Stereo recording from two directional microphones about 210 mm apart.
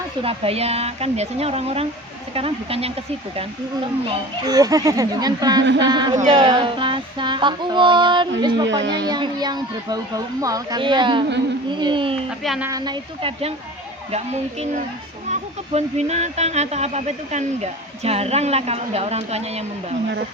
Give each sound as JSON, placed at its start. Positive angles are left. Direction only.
{"t": 0.2, "sound": "speech", "side_deg": -25}
{"t": 4.4, "sound": "speech", "side_deg": -15}
{"t": 5.6, "sound": "speech", "side_deg": -60}
{"t": 5.9, "sound": "speech", "side_deg": -20}
{"t": 8.8, "sound": "speech", "side_deg": -55}
{"t": 9.0, "sound": "speech", "side_deg": -20}
{"t": 12.4, "sound": "speech", "side_deg": 0}
{"t": 12.6, "sound": "speech", "side_deg": -20}
{"t": 14.6, "sound": "speech", "side_deg": -35}